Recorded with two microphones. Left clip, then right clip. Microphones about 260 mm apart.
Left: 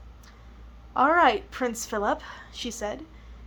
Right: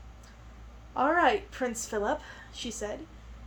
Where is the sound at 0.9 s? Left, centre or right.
Left.